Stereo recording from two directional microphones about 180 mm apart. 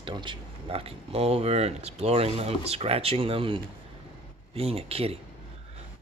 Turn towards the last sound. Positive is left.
turn(degrees=-35)  # may be behind; listen again after turning